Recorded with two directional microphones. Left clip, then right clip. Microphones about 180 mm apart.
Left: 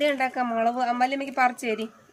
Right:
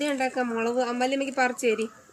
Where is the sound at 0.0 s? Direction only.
30° left (ahead or behind).